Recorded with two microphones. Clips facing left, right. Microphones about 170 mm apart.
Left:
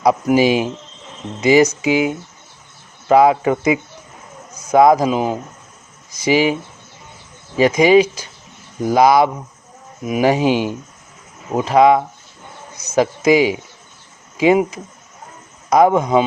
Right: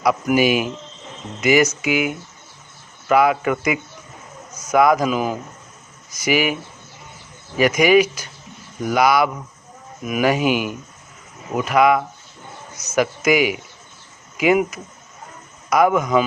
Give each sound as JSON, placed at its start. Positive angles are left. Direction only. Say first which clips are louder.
{"t": 0.1, "sound": "speech", "louder": "left 3 dB", "side_deg": 30}
{"t": 15.7, "sound": "speech", "louder": "left 3 dB", "side_deg": 30}